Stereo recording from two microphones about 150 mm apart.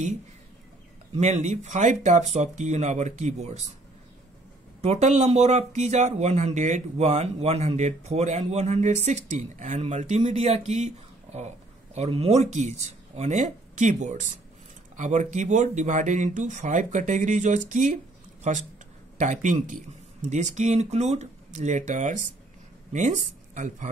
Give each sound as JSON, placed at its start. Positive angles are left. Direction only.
{"t": 1.1, "sound": "speech", "side_deg": -45}
{"t": 4.8, "sound": "speech", "side_deg": -50}